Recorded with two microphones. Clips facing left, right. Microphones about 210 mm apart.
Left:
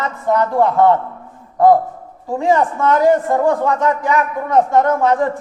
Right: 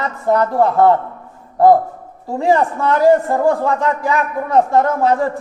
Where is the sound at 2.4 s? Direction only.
30° right (ahead or behind).